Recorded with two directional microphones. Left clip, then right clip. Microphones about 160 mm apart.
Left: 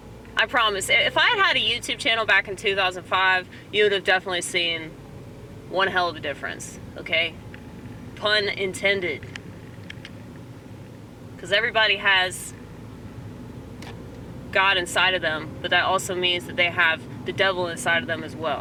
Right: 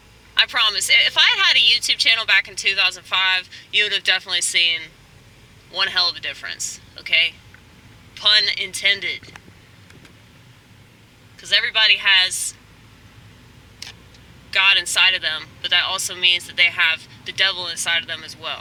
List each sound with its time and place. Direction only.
0.3 s speech: 20° right (ahead or behind)
11.3 s speech: 20° right (ahead or behind)
14.5 s speech: 20° right (ahead or behind)